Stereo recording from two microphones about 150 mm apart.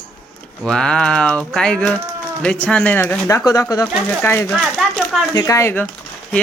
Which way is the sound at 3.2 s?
20° left (ahead or behind).